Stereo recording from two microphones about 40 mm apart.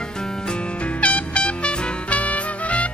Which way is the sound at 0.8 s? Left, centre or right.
Left.